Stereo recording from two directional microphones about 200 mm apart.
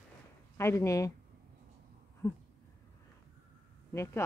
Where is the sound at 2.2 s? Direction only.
15° left (ahead or behind).